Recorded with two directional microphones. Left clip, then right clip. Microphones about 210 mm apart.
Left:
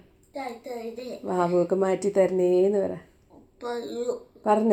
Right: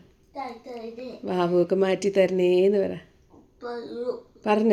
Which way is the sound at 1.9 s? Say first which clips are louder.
Right 1 dB; 15° right (ahead or behind).